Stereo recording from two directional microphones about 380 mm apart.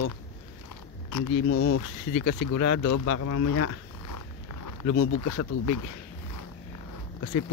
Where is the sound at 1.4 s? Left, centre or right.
Left.